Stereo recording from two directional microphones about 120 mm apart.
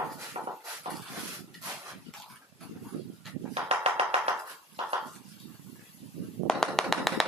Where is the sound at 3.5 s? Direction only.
60° right (ahead or behind).